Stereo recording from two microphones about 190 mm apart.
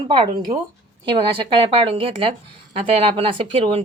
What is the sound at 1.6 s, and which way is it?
A woman's voice, 30° right (ahead or behind).